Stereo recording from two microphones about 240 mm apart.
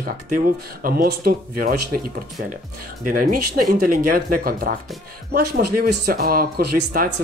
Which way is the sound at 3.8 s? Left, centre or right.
Right.